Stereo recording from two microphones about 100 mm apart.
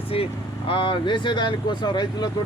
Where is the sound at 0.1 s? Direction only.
65° left (ahead or behind).